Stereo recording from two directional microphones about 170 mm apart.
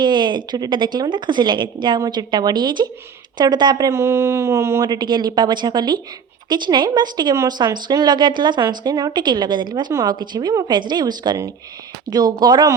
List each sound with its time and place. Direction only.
0.0 s speech: 25° right (ahead or behind)